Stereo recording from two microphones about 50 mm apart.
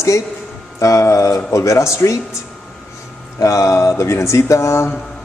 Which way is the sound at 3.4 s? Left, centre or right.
Left.